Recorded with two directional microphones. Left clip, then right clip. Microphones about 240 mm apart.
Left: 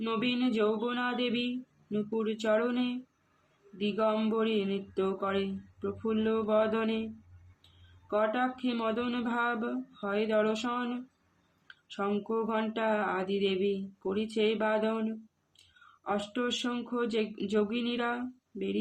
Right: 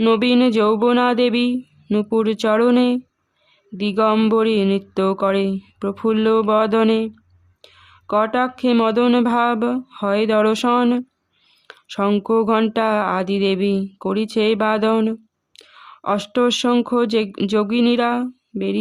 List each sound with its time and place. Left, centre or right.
0.0 s speech: right
8.0 s speech: right
16.0 s speech: right